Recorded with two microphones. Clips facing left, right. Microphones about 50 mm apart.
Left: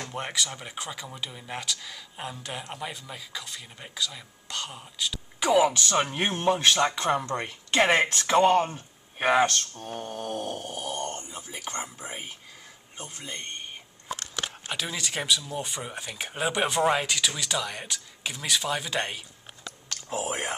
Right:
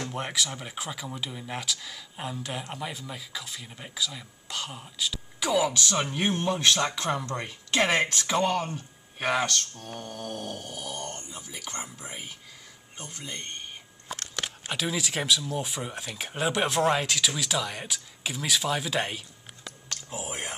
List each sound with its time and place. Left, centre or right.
0.0 s speech: centre
5.4 s speech: left
6.3 s speech: centre
8.4 s speech: left
9.2 s speech: left
11.2 s speech: left
11.7 s speech: centre
20.1 s speech: left